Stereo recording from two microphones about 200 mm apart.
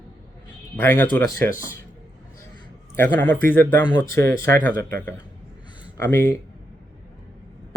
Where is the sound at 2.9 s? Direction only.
10° left (ahead or behind).